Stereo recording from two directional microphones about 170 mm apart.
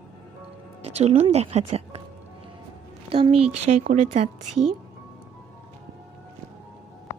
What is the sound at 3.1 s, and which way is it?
A woman's voice, 35° right (ahead or behind).